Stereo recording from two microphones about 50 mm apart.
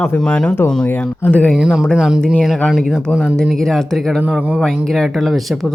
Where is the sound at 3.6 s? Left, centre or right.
Centre.